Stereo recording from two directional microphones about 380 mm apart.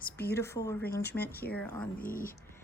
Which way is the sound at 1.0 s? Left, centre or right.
Left.